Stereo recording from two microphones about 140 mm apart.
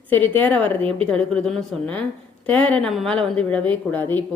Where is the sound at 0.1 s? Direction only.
15° left (ahead or behind).